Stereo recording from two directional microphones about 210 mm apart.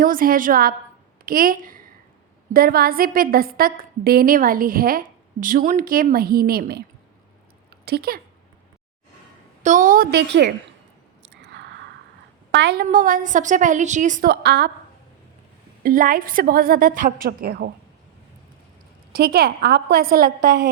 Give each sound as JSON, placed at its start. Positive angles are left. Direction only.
{"t": 0.0, "sound": "a woman's voice", "side_deg": -40}
{"t": 7.9, "sound": "a woman's voice", "side_deg": -50}
{"t": 9.6, "sound": "a woman's voice", "side_deg": -40}
{"t": 11.4, "sound": "a sound", "side_deg": -55}
{"t": 12.5, "sound": "a woman's voice", "side_deg": -55}
{"t": 12.9, "sound": "a woman's voice", "side_deg": -40}
{"t": 15.8, "sound": "a woman's voice", "side_deg": -40}
{"t": 19.1, "sound": "a woman's voice", "side_deg": -45}